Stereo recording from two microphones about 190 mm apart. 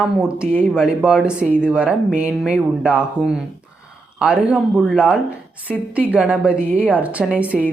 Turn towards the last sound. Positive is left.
turn(degrees=-5)  # may be behind; listen again after turning